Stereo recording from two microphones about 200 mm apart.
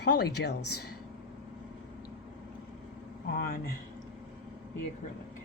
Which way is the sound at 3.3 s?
50° left (ahead or behind).